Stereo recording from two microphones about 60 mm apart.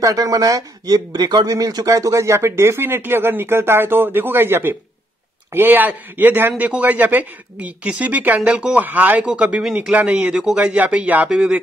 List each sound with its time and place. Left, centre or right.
0.0 s a man's voice: right; by 8.8 s centre
8.8 s a man's voice: right
9.2 s a man's voice: centre
11.2 s a man's voice: centre